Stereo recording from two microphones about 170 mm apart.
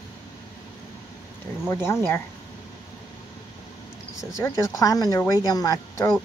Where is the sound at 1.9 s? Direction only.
15° left (ahead or behind).